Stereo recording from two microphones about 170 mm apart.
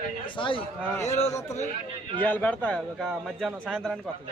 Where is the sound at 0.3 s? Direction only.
30° left (ahead or behind).